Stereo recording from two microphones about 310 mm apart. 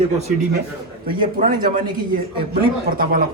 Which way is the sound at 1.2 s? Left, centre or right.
Right.